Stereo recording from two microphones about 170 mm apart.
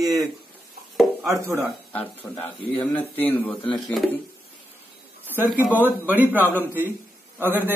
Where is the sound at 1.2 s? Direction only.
15° right (ahead or behind).